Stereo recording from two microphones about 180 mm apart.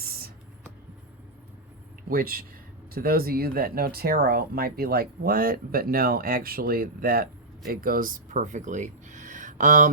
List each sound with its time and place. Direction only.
2.0 s speech: 55° right (ahead or behind)